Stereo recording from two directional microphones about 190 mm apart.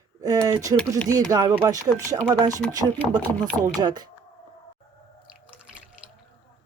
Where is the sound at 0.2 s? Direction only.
20° right (ahead or behind).